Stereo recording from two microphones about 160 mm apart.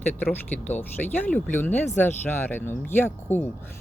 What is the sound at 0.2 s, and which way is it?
Speech, 10° left (ahead or behind).